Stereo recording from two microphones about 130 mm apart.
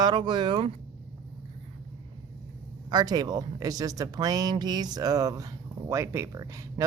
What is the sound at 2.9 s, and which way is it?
Speech, 30° right (ahead or behind).